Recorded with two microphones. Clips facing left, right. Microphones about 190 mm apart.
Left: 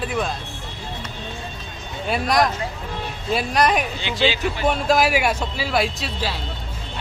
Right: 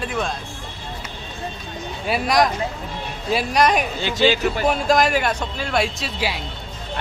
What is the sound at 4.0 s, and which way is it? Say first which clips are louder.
Speech: right 3 dB; 45° right (ahead or behind).